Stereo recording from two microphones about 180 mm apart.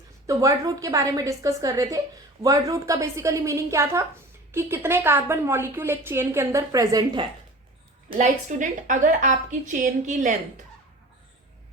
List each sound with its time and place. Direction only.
0.3 s a woman's voice: 15° right (ahead or behind)
8.1 s a woman's voice: 40° right (ahead or behind)